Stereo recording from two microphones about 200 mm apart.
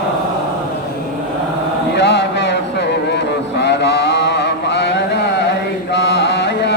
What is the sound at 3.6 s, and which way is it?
Mantra, 60° left (ahead or behind).